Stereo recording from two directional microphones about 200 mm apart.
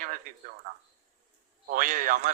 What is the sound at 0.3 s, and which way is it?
Speech, 45° right (ahead or behind).